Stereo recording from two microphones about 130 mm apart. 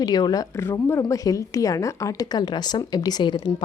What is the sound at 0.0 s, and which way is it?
Speech, 30° left (ahead or behind).